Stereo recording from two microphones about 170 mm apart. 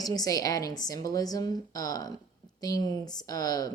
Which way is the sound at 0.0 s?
20° left (ahead or behind).